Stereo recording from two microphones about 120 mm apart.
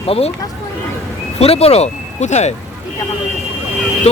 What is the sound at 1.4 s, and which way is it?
Speech, 60° left (ahead or behind).